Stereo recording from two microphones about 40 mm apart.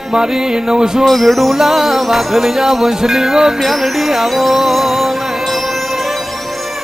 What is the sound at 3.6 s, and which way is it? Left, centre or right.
Music, centre.